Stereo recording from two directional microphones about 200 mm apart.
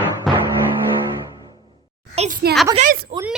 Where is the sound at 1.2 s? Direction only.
20° right (ahead or behind).